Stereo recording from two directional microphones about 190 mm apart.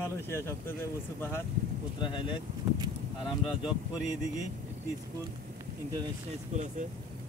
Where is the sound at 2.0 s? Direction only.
25° left (ahead or behind).